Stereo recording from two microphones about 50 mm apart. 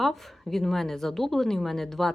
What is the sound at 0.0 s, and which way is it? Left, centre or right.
A woman's voice, centre.